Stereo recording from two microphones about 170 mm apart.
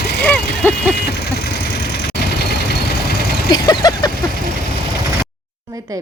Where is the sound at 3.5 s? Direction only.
25° left (ahead or behind).